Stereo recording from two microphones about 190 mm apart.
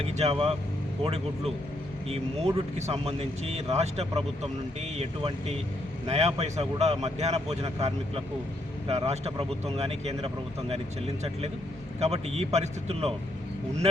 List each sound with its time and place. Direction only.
0.0 s a man's voice: 30° right (ahead or behind)
2.0 s a man's voice: 30° right (ahead or behind)